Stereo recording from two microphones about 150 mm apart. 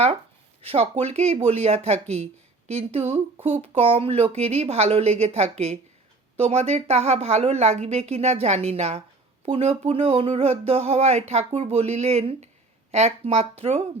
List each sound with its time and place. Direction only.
0.6 s a woman's voice: 40° right (ahead or behind)